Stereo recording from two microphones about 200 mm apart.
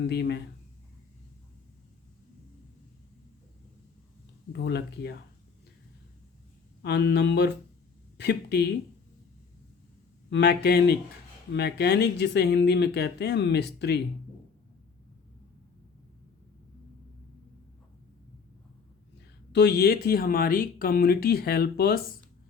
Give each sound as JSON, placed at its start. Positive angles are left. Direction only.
{"t": 0.0, "sound": "speech", "side_deg": 60}
{"t": 4.5, "sound": "speech", "side_deg": 55}
{"t": 6.8, "sound": "speech", "side_deg": 55}
{"t": 10.2, "sound": "speech", "side_deg": 60}
{"t": 19.5, "sound": "speech", "side_deg": 55}